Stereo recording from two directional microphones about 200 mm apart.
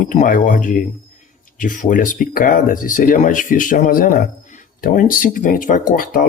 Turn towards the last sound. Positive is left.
turn(degrees=45)  # may be behind; listen again after turning